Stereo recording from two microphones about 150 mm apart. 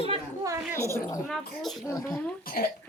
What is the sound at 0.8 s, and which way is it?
Speech, 20° left (ahead or behind).